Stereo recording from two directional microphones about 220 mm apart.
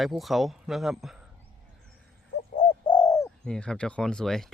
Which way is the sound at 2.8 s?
20° left (ahead or behind).